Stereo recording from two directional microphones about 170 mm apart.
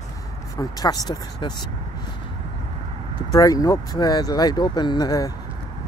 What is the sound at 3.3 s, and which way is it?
Speech, 20° left (ahead or behind).